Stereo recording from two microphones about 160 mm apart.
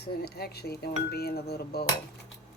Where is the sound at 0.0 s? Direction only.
80° left.